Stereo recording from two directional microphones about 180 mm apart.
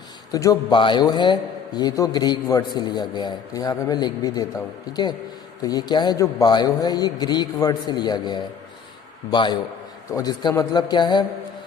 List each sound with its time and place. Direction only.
0.3 s a man's voice: 20° left (ahead or behind)
5.6 s a man's voice: 20° left (ahead or behind)